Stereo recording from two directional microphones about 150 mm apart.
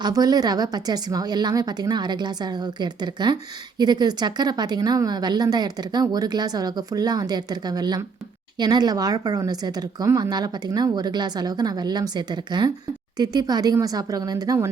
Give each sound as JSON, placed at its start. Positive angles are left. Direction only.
{"t": 0.0, "sound": "a woman's voice", "side_deg": -25}